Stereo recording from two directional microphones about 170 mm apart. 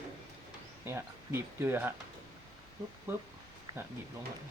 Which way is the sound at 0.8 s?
15° right (ahead or behind).